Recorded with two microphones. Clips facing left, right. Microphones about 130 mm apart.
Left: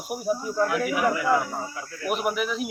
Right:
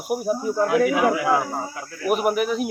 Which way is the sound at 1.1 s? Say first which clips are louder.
Right 3 dB; 90° right.